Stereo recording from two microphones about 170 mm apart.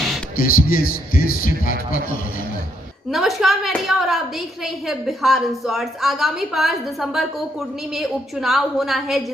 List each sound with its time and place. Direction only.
0.3 s a man's voice: 60° left (ahead or behind)
3.1 s a woman's voice: centre (ahead or behind)